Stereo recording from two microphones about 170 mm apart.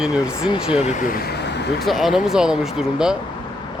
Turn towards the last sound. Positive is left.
turn(degrees=-5)  # may be behind; listen again after turning